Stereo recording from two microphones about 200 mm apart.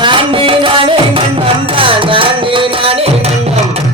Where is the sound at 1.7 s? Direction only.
25° right (ahead or behind).